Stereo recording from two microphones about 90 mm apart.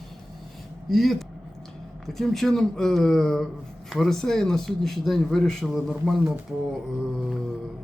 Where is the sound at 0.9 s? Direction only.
Centre (ahead or behind).